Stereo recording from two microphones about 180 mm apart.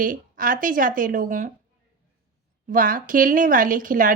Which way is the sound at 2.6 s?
50° right (ahead or behind).